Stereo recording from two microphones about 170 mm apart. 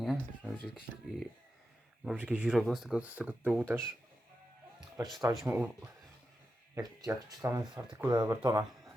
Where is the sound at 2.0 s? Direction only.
5° right (ahead or behind).